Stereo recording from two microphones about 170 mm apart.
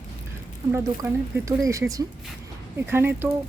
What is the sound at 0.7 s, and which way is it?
Speech, 15° right (ahead or behind).